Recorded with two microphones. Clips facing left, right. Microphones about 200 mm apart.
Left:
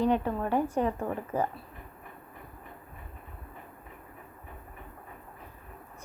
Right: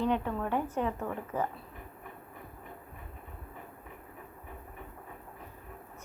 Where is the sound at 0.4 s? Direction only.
10° left (ahead or behind).